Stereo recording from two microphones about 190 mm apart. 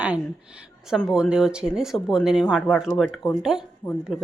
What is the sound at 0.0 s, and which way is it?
Speech, 5° right (ahead or behind).